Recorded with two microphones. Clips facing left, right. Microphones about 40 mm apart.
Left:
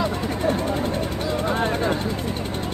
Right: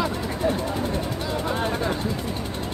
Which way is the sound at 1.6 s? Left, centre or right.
Left.